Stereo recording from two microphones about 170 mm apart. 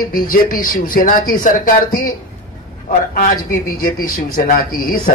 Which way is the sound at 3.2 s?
55° left (ahead or behind).